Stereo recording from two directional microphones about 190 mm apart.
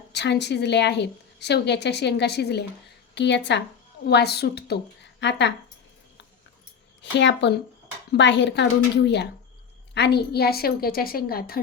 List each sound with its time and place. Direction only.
0.1 s a woman's voice: 65° left (ahead or behind)
7.0 s speech: 70° left (ahead or behind)
9.9 s a woman's voice: 60° left (ahead or behind)